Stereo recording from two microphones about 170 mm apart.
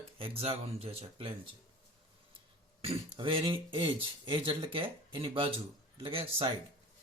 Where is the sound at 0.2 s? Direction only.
35° right (ahead or behind).